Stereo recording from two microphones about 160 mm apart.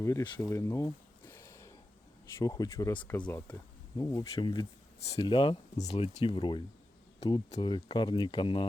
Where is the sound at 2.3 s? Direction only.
20° left (ahead or behind).